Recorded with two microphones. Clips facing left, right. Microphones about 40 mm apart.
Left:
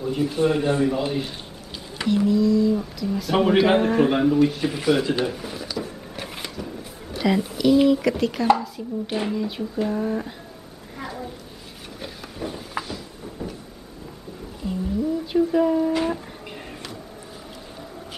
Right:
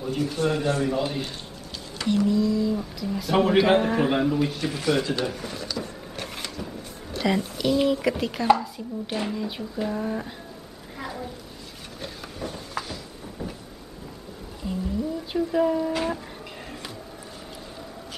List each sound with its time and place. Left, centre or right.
0.2 s a man's voice: centre
0.8 s speech: centre
5.2 s drawer open or close: centre
9.1 s speech: centre
11.0 s a sound: centre
14.6 s a sound: centre
15.3 s speech: centre